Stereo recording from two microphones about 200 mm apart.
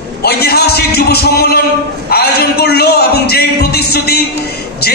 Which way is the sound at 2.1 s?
50° left (ahead or behind).